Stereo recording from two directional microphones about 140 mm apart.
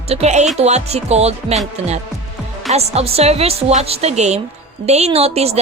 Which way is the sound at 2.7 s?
50° right (ahead or behind).